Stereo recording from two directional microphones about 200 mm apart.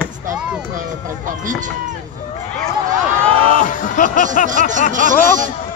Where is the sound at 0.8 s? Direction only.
40° right (ahead or behind).